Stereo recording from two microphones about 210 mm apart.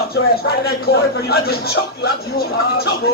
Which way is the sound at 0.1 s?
45° left (ahead or behind).